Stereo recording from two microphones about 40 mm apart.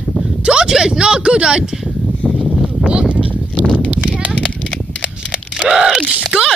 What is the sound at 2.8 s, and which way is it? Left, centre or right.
Sheep, right.